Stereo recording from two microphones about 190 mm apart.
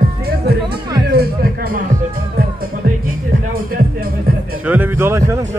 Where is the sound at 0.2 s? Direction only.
55° right (ahead or behind).